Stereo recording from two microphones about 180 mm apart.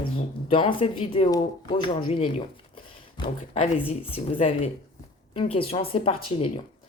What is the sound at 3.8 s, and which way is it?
Speech, 35° left (ahead or behind).